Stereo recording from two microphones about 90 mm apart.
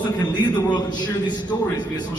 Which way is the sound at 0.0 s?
55° left (ahead or behind).